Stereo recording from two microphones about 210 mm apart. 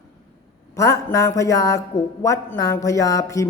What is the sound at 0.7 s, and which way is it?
A man's voice, 15° left (ahead or behind).